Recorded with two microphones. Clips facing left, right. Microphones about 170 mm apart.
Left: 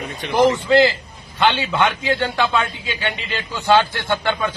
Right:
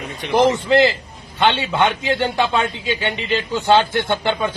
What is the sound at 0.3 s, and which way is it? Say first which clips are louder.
A man's voice: even; 20° right (ahead or behind).